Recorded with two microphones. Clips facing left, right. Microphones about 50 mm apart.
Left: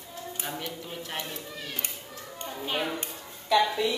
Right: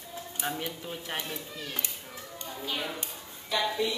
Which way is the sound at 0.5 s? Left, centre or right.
Centre.